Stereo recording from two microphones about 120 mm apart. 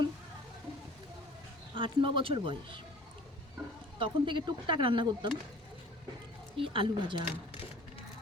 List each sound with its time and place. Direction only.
1.7 s speech: 45° right (ahead or behind)
3.9 s speech: 45° right (ahead or behind)
6.6 s speech: 45° right (ahead or behind)